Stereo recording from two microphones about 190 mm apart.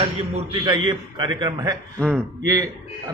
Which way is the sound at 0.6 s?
25° right (ahead or behind).